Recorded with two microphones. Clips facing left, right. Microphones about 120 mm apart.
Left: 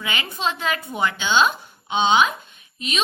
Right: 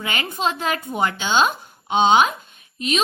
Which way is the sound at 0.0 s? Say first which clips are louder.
Right 2 dB; 45° right (ahead or behind).